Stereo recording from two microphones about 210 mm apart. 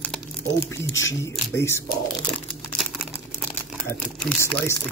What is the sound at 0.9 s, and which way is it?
Speech, 65° left (ahead or behind).